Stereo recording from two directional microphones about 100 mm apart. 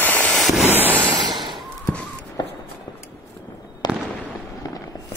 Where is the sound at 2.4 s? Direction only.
45° left (ahead or behind).